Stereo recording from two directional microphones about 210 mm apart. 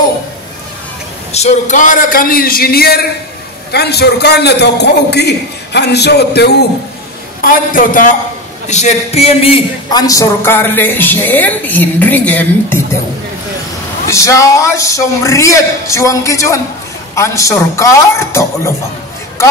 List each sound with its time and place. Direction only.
1.3 s a man's voice: 30° left (ahead or behind); by 6.5 s 50° left (ahead or behind)
7.7 s a man's voice: 40° left (ahead or behind); by 12.8 s 10° left (ahead or behind)
14.0 s a man's voice: 15° left (ahead or behind)